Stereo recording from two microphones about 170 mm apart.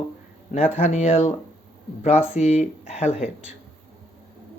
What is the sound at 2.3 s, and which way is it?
Speech, 40° left (ahead or behind).